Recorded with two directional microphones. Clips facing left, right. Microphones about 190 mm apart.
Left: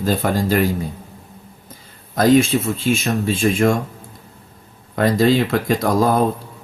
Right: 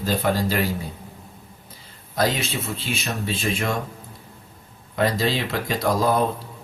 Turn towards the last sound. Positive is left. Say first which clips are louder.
# left 4 dB
turn(degrees=50)  # may be behind; listen again after turning